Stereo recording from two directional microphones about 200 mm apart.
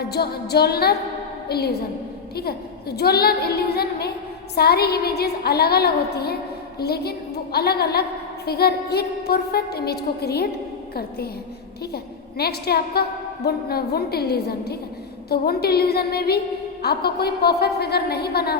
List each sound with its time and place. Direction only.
0.0 s a woman's voice: 55° left (ahead or behind)
12.4 s a woman's voice: 50° left (ahead or behind)